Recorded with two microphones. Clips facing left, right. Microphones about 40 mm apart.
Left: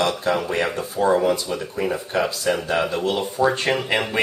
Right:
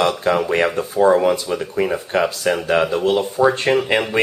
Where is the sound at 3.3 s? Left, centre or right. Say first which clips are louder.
Right 2 dB; centre.